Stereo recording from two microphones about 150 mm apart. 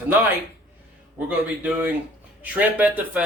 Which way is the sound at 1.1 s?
10° right (ahead or behind).